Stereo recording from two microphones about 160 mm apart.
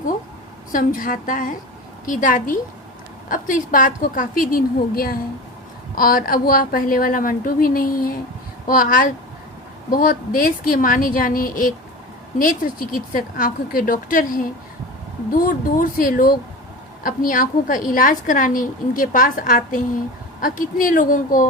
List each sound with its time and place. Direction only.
0.7 s a woman's voice: 60° left (ahead or behind)